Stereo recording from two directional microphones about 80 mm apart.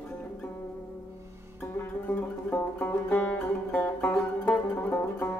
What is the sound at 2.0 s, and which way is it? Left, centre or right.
Music, left.